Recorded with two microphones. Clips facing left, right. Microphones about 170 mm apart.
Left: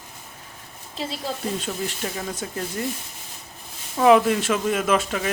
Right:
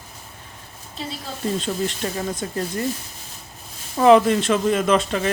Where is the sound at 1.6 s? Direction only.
10° left (ahead or behind).